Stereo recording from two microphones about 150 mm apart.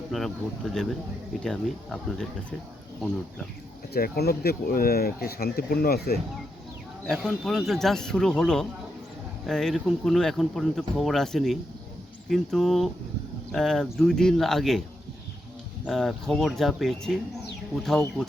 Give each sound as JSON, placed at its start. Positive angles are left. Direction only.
{"t": 0.1, "sound": "speech", "side_deg": 0}
{"t": 3.9, "sound": "speech", "side_deg": 85}
{"t": 7.0, "sound": "speech", "side_deg": 5}
{"t": 15.9, "sound": "speech", "side_deg": 0}